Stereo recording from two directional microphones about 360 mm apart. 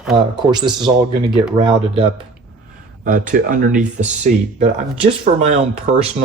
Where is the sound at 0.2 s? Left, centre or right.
Centre.